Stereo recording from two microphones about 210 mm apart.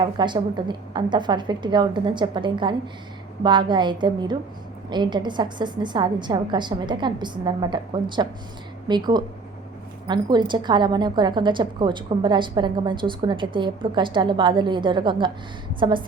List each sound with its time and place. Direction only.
0.0 s a woman's voice: 20° right (ahead or behind)